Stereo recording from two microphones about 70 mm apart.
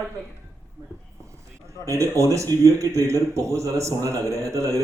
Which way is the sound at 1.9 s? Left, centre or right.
Right.